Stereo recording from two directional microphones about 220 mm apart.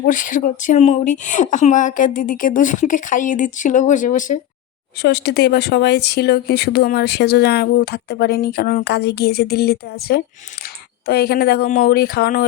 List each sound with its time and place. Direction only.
0.0 s speech: 35° left (ahead or behind)
5.0 s speech: 50° left (ahead or behind)